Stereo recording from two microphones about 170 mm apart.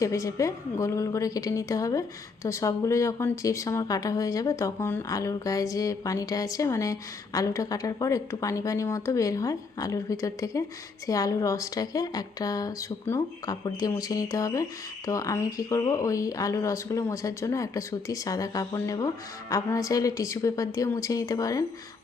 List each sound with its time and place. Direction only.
0.0 s a woman's voice: 20° left (ahead or behind)